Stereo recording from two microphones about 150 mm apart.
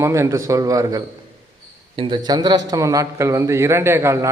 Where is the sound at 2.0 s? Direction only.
35° right (ahead or behind).